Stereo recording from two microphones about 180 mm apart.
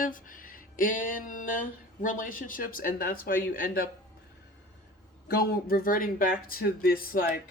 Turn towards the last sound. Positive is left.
turn(degrees=55)  # may be behind; listen again after turning